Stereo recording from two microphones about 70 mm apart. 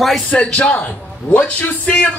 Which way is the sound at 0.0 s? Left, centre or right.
Centre.